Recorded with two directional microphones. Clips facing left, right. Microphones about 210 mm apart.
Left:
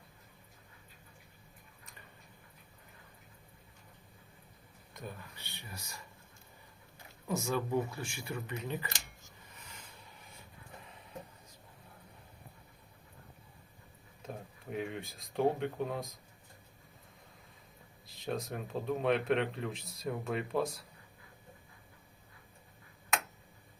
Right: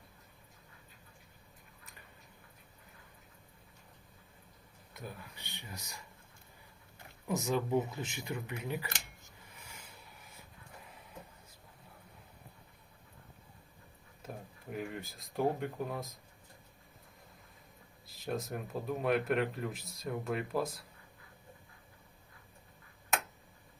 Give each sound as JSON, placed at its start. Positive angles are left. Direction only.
{"t": 4.9, "sound": "speech", "side_deg": -15}
{"t": 7.3, "sound": "speech", "side_deg": -15}
{"t": 9.6, "sound": "a sound", "side_deg": -10}
{"t": 14.7, "sound": "speech", "side_deg": 0}
{"t": 18.0, "sound": "speech", "side_deg": 0}